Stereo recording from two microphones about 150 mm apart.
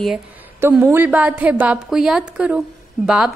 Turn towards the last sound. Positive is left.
turn(degrees=-5)  # may be behind; listen again after turning